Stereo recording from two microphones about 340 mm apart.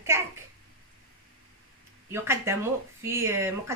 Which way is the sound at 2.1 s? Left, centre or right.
Centre.